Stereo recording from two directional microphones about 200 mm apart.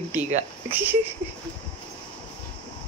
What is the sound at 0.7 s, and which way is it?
Speech, 10° right (ahead or behind).